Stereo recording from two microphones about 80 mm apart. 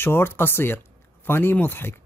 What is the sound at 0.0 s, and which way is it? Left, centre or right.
Speech, left.